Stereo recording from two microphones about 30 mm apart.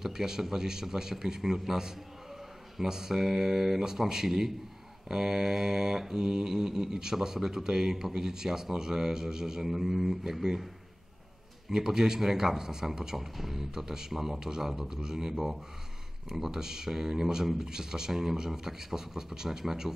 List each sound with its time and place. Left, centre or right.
0.0 s speech: centre
6.1 s speech: right
11.7 s speech: right